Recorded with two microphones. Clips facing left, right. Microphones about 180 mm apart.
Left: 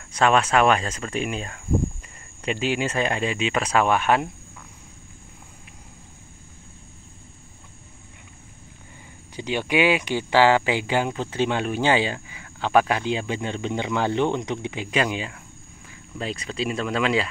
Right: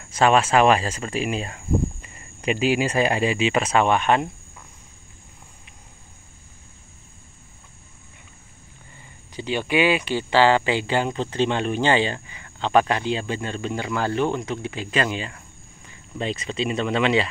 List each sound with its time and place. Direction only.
0.0 s speech: 5° right (ahead or behind)
9.3 s speech: 15° left (ahead or behind)